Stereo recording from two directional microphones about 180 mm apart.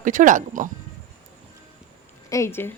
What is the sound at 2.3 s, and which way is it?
Speech, 15° left (ahead or behind).